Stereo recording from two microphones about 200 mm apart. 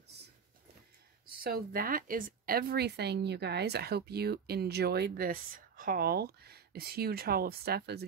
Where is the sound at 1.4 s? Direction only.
45° right (ahead or behind).